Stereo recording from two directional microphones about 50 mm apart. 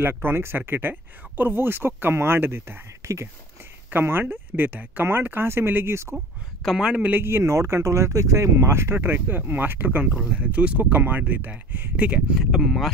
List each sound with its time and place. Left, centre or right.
0.0 s speech: right
3.0 s speech: right
4.0 s speech: right
6.6 s speech: centre
7.2 s speech: right
8.6 s speech: right
12.4 s speech: centre